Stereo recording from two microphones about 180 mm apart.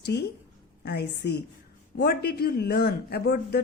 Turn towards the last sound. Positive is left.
turn(degrees=60)  # may be behind; listen again after turning